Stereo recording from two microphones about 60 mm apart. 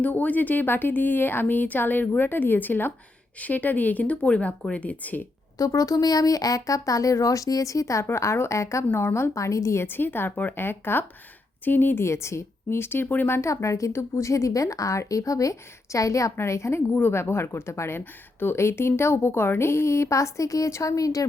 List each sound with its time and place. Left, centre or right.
0.0 s speech: left
5.5 s speech: left
8.0 s a woman's voice: left
8.9 s speech: left
9.1 s a woman's voice: left
9.8 s speech: left
12.0 s a woman's voice: left
13.5 s a woman's voice: left
16.4 s a woman's voice: left